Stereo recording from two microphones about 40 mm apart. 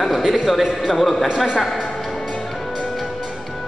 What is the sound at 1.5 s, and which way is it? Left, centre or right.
Speech, centre.